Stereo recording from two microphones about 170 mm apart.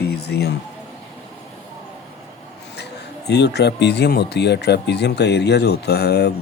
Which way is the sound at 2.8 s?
80° left.